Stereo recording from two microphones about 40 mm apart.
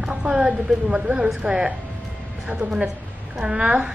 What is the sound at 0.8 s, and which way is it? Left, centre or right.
Speech, right.